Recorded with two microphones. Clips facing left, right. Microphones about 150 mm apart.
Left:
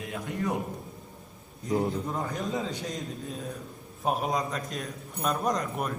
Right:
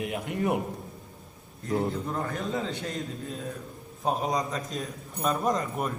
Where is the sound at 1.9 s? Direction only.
15° left (ahead or behind).